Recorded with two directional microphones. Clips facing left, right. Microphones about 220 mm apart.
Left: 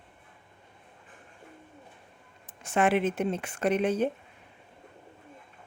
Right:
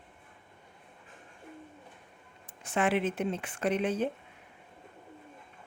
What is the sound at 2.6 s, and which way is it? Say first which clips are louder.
Speech: left 3 dB; 45° left (ahead or behind).